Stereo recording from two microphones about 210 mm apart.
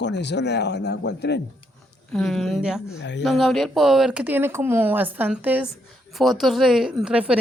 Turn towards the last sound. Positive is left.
turn(degrees=-5)  # may be behind; listen again after turning